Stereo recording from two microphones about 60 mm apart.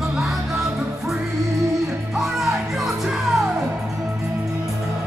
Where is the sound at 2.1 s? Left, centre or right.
Centre.